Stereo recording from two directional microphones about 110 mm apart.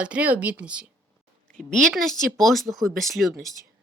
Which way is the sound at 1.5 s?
10° left (ahead or behind).